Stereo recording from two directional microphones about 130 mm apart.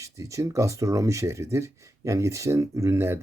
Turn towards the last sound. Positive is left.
turn(degrees=-20)  # may be behind; listen again after turning